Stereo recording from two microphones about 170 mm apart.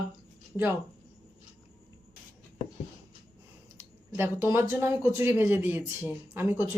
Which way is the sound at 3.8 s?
15° right (ahead or behind).